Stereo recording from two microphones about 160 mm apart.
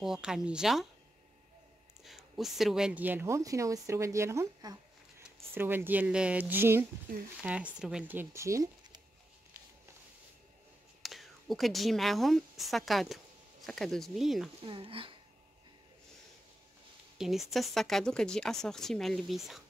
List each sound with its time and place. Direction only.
0.0 s speech: 5° right (ahead or behind)
2.0 s speech: centre (ahead or behind); by 9.0 s 20° right (ahead or behind)
11.0 s a woman's voice: centre (ahead or behind)
14.6 s speech: 35° right (ahead or behind)
17.2 s speech: centre (ahead or behind)